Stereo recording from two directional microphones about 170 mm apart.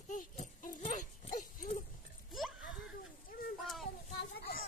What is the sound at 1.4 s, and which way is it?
Dog, 50° left (ahead or behind).